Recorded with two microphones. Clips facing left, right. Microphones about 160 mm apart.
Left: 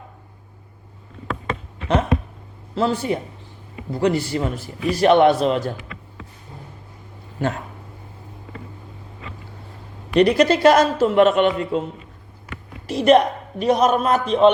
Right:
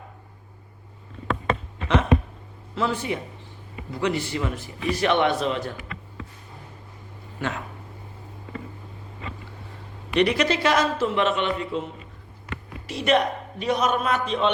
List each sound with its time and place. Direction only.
2.7 s a man's voice: 35° left (ahead or behind)
10.2 s a man's voice: 40° left (ahead or behind)
12.9 s a man's voice: 40° left (ahead or behind)